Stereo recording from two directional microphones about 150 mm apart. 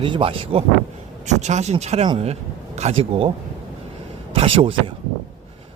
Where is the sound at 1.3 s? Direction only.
50° right (ahead or behind).